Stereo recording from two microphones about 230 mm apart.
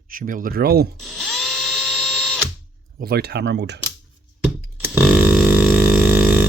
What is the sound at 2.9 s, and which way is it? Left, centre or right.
Speech, right.